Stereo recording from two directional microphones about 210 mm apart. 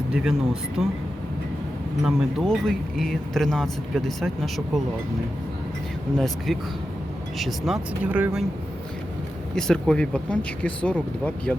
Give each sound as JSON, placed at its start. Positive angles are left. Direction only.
{"t": 0.1, "sound": "speech", "side_deg": -5}
{"t": 2.0, "sound": "speech", "side_deg": 0}
{"t": 6.1, "sound": "speech", "side_deg": 0}
{"t": 9.6, "sound": "speech", "side_deg": 0}